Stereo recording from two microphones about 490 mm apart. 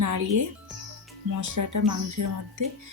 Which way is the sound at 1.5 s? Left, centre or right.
Right.